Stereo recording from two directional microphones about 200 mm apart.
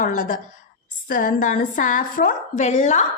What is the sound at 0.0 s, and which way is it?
A woman's voice, 40° left (ahead or behind).